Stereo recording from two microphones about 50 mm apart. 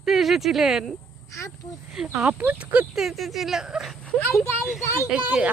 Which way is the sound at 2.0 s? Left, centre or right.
Centre.